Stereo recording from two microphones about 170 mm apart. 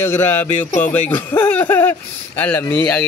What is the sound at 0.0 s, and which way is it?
Speech, 15° left (ahead or behind).